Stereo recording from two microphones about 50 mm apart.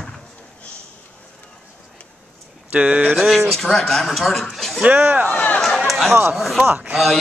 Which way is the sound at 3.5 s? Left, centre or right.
Centre.